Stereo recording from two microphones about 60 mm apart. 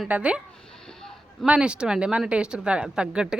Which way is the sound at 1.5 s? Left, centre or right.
Centre.